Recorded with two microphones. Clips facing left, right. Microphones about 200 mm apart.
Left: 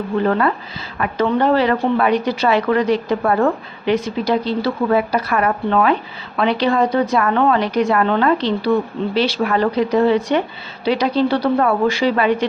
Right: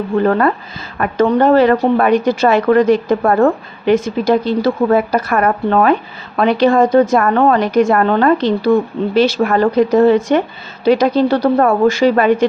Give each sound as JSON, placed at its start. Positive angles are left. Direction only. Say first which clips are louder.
{"t": 0.3, "sound": "a woman's voice", "louder": "right 4 dB", "side_deg": -45}